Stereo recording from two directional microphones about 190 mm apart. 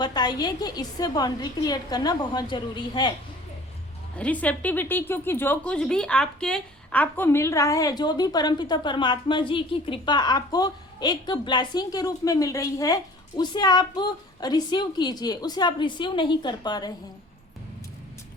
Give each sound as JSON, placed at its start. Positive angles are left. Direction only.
{"t": 0.0, "sound": "a woman's voice", "side_deg": 20}
{"t": 4.2, "sound": "a woman's voice", "side_deg": 5}